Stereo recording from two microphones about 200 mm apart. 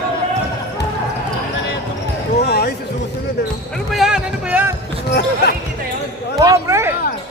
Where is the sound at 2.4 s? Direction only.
55° left (ahead or behind).